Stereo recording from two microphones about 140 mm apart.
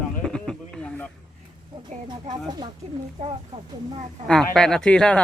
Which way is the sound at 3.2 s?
55° right (ahead or behind).